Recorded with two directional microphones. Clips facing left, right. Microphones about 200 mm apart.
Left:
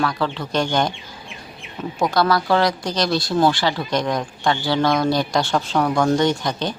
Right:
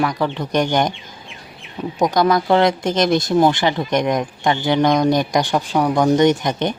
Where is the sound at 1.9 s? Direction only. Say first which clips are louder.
Right 3 dB; 15° right (ahead or behind).